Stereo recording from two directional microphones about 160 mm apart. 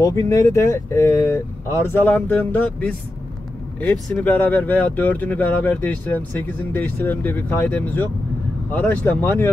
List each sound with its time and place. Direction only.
0.0 s speech: 20° left (ahead or behind)